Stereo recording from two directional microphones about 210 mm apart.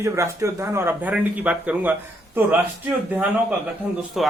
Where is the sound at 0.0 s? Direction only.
15° right (ahead or behind).